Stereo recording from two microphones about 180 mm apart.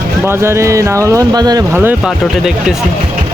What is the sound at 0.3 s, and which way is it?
Speech, 15° right (ahead or behind).